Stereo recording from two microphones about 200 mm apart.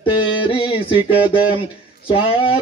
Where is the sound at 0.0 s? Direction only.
25° left (ahead or behind).